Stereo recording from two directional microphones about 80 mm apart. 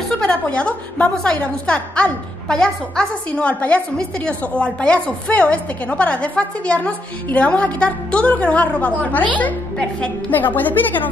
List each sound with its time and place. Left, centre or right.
0.2 s a woman's voice: centre